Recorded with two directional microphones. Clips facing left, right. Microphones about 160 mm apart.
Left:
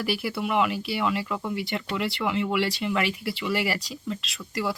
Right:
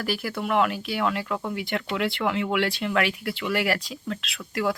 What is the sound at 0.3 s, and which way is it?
Speech, 5° left (ahead or behind).